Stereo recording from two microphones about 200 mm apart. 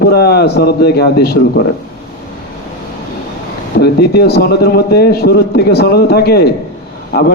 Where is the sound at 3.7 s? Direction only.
55° left (ahead or behind).